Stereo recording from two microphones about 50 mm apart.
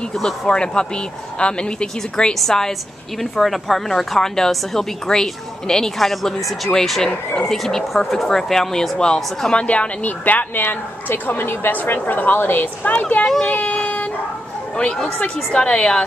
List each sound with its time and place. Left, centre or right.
0.2 s a woman's voice: centre
9.7 s a woman's voice: left
12.8 s a woman's voice: left
13.6 s dog: left
14.8 s a woman's voice: left